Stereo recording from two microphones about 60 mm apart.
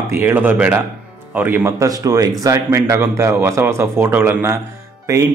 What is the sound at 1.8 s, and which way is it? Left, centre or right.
Speech, right.